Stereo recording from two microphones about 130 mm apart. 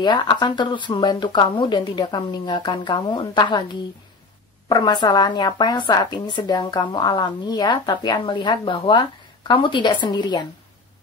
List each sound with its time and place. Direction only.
0.0 s a woman's voice: 35° left (ahead or behind)
4.6 s a woman's voice: 35° left (ahead or behind)